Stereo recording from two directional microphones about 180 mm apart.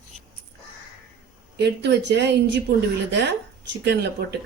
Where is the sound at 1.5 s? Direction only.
70° right (ahead or behind).